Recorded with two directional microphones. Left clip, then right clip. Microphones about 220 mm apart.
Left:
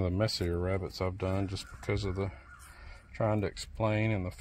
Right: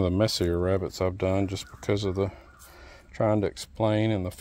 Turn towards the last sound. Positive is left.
turn(degrees=-45)  # may be behind; listen again after turning